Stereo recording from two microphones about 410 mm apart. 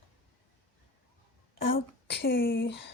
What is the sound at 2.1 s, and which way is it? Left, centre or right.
Speech, left.